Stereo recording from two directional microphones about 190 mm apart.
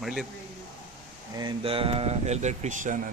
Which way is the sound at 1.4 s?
25° right (ahead or behind).